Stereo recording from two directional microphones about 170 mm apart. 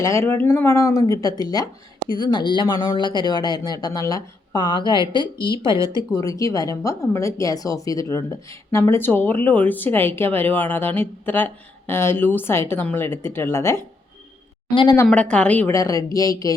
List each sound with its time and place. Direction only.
0.0 s a woman's voice: 15° left (ahead or behind)
15.0 s a woman's voice: 5° left (ahead or behind)